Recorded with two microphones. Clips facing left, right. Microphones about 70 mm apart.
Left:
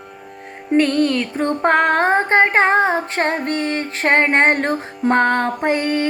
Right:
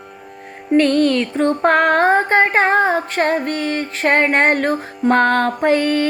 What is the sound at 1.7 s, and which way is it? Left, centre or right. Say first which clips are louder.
Female singing: right 1 dB; left.